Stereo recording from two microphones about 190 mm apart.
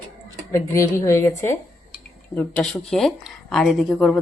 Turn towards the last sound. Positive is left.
turn(degrees=0)  # may be behind; listen again after turning